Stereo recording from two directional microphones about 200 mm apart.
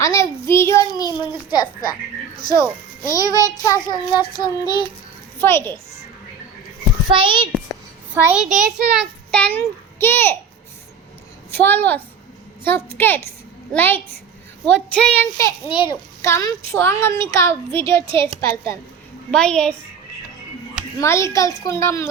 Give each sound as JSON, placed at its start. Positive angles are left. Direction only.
{"t": 0.0, "sound": "a child's voice", "side_deg": 15}
{"t": 3.1, "sound": "a child's voice", "side_deg": 20}
{"t": 4.1, "sound": "child singing", "side_deg": 20}
{"t": 5.4, "sound": "a child's voice", "side_deg": 10}
{"t": 7.2, "sound": "a child's voice", "side_deg": -25}
{"t": 8.1, "sound": "a child's voice", "side_deg": -10}
{"t": 11.5, "sound": "a child's voice", "side_deg": 10}
{"t": 21.0, "sound": "a child's voice", "side_deg": 15}